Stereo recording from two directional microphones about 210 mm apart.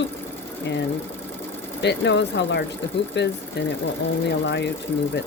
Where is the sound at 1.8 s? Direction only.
55° left (ahead or behind).